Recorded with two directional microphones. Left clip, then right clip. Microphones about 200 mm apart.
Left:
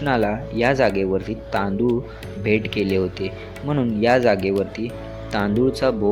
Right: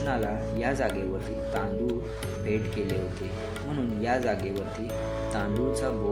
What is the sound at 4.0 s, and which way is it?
Speech, 40° left (ahead or behind).